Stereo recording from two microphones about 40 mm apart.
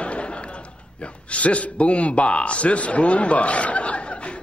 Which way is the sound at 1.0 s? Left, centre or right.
Left.